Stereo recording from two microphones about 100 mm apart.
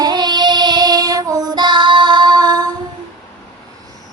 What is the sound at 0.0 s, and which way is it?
Child singing, 45° right (ahead or behind).